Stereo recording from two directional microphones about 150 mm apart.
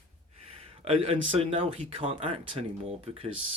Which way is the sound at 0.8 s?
40° right (ahead or behind).